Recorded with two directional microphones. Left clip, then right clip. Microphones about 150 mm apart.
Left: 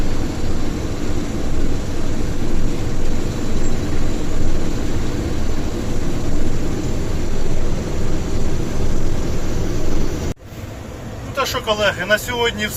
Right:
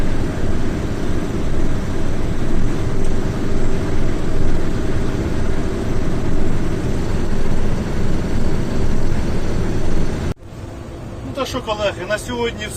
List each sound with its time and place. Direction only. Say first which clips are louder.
11.7 s speech: left 4 dB; centre (ahead or behind)